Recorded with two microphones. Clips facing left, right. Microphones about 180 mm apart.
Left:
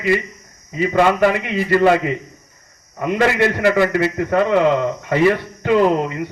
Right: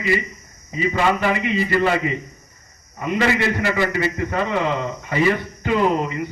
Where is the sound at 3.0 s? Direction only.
55° left (ahead or behind).